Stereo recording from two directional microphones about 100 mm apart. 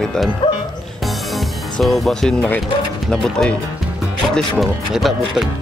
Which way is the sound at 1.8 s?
Centre (ahead or behind).